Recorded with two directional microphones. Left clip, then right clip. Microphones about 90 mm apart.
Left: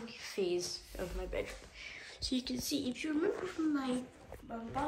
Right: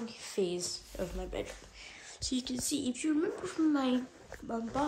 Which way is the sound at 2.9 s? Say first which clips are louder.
Right 3 dB; 20° right (ahead or behind).